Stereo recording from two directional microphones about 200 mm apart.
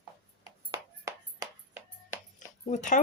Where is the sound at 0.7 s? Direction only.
15° right (ahead or behind).